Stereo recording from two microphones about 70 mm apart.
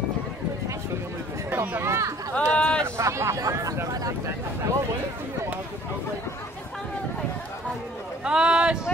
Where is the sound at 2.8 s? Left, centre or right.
Right.